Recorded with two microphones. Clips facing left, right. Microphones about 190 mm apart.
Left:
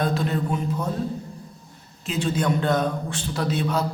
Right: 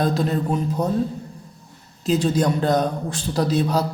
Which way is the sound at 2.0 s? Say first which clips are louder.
Right 5 dB; 40° right (ahead or behind).